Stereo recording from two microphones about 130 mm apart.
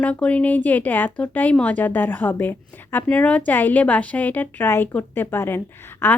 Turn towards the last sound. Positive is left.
turn(degrees=15)  # may be behind; listen again after turning